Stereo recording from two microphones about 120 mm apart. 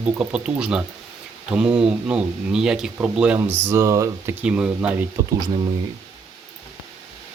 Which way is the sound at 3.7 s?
25° right (ahead or behind).